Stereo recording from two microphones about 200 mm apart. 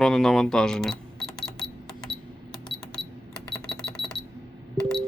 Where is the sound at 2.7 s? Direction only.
25° left (ahead or behind).